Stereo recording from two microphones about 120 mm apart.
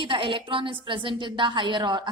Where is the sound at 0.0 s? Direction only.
45° right (ahead or behind).